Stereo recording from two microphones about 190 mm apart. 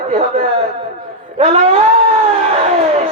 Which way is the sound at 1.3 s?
35° right (ahead or behind).